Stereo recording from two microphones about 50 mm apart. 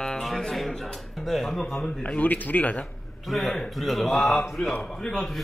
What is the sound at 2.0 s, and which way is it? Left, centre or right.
Speech, left.